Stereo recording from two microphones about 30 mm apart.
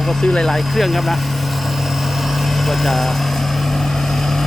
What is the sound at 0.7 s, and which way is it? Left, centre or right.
Speech, centre.